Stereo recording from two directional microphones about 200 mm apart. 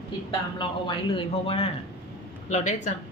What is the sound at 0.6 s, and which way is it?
A man's voice, 25° left (ahead or behind).